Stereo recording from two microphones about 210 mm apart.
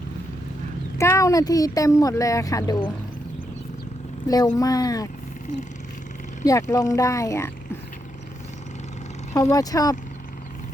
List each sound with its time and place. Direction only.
0.9 s speech: 15° left (ahead or behind)
4.5 s speech: 15° left (ahead or behind)
6.4 s speech: 15° left (ahead or behind)
9.3 s speech: 15° left (ahead or behind)